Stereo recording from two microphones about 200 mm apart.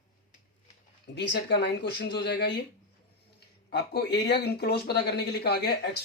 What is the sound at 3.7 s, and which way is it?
Speech, 55° left (ahead or behind).